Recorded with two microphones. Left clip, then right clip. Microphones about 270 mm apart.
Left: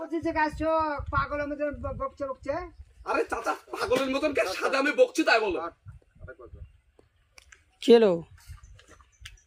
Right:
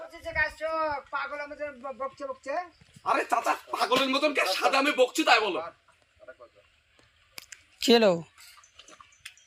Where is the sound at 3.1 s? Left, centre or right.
Centre.